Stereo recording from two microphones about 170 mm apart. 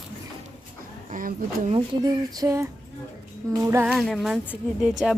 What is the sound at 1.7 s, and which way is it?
Speech, 25° right (ahead or behind).